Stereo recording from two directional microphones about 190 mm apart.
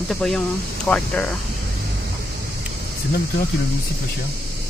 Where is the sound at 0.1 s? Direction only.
Centre (ahead or behind).